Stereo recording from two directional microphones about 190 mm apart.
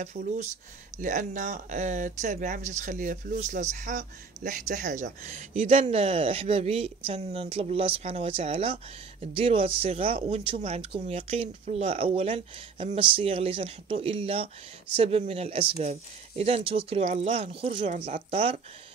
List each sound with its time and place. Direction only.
0.0 s speech: 35° right (ahead or behind)